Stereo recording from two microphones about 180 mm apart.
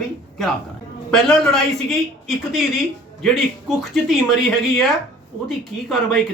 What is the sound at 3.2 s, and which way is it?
Speech, centre (ahead or behind).